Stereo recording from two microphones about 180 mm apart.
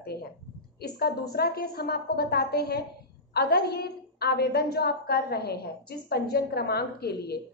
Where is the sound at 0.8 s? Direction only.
60° left (ahead or behind).